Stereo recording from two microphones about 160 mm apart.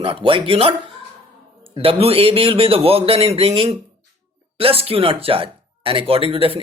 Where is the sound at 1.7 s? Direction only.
35° right (ahead or behind).